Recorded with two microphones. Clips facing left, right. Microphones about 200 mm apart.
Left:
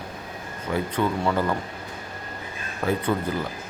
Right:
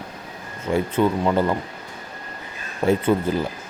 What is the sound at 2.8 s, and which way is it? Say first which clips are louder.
Speech: right 5 dB; 25° right (ahead or behind).